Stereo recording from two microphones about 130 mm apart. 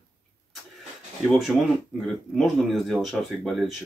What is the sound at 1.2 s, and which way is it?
Speech, centre (ahead or behind).